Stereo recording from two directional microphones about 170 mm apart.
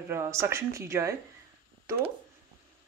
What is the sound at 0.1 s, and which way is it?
Speech, 15° right (ahead or behind).